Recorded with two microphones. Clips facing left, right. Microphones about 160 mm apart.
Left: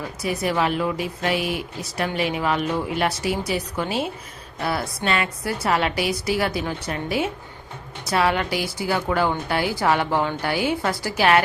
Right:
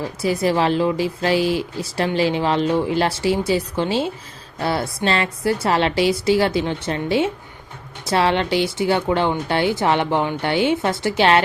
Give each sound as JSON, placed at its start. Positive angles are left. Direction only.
{"t": 0.0, "sound": "speech", "side_deg": -30}